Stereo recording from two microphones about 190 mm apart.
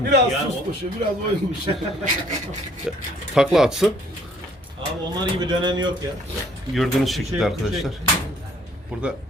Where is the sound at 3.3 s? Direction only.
Centre (ahead or behind).